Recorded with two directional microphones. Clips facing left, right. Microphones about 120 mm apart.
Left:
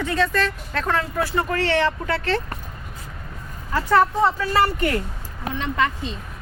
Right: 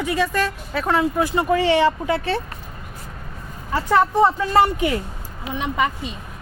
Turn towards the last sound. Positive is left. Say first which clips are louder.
# right 1 dB
turn(degrees=-15)  # may be behind; listen again after turning